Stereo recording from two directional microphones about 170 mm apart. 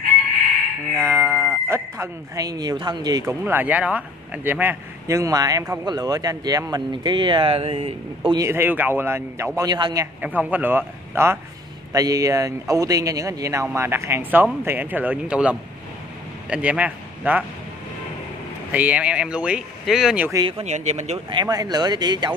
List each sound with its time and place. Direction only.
0.9 s fowl: 15° right (ahead or behind)
1.7 s speech: 20° right (ahead or behind)
8.5 s speech: 10° right (ahead or behind)
10.2 s a man's voice: 10° right (ahead or behind)
18.7 s speech: 10° right (ahead or behind)
20.3 s speech: 30° right (ahead or behind)
20.6 s speech: 40° right (ahead or behind)
21.3 s speech: 25° right (ahead or behind)